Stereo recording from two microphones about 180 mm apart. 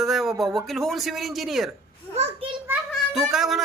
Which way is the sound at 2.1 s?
35° right (ahead or behind).